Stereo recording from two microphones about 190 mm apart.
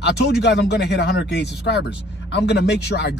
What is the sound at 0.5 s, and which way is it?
Speech, 65° left (ahead or behind).